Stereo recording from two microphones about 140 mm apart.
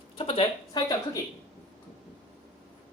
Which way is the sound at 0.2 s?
40° left (ahead or behind).